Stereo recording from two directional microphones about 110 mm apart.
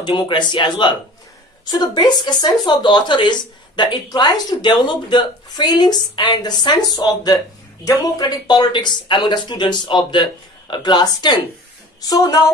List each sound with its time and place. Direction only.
0.0 s speech: 45° left (ahead or behind)